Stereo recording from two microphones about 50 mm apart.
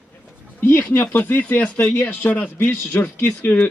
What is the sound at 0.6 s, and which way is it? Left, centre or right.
A man's voice, left.